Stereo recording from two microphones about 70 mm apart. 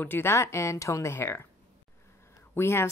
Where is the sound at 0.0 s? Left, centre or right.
Left.